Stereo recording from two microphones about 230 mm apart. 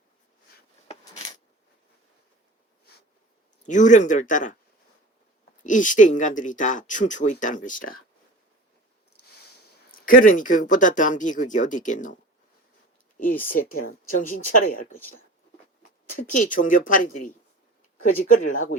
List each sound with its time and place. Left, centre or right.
3.7 s speech: left
5.6 s speech: left
9.9 s speech: left
16.0 s speech: left